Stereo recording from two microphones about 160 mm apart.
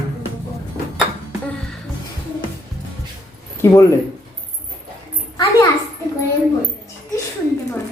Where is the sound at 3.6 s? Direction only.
15° left (ahead or behind).